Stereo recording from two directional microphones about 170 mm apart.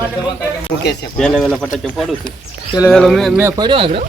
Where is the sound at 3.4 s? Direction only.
25° right (ahead or behind).